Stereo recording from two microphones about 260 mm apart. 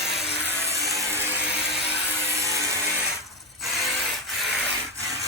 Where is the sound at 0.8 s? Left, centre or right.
Centre.